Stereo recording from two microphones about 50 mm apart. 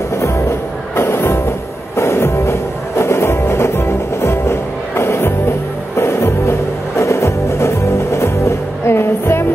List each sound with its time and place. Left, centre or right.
0.1 s music: left